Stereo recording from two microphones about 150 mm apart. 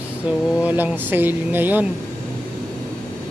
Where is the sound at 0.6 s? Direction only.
10° right (ahead or behind).